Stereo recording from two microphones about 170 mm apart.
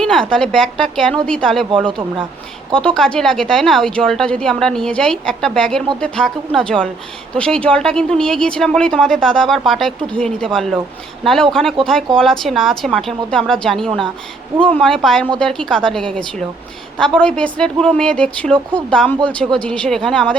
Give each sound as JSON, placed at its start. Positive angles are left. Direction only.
{"t": 0.0, "sound": "speech", "side_deg": 5}
{"t": 1.9, "sound": "speech", "side_deg": -30}
{"t": 2.7, "sound": "speech", "side_deg": 5}